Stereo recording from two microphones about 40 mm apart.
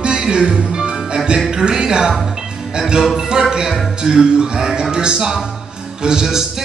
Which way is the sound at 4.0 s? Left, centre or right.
Centre.